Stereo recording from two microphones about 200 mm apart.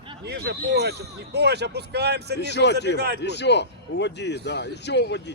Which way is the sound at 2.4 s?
60° left (ahead or behind).